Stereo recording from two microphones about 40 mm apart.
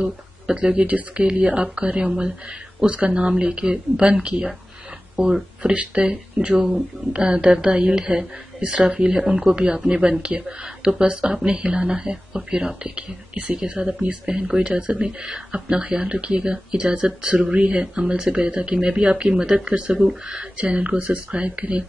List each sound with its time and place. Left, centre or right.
0.7 s speech: right
3.3 s speech: right
6.3 s speech: right
6.7 s speech: right
9.1 s speech: centre
12.0 s speech: centre; by 17.7 s right
18.2 s speech: right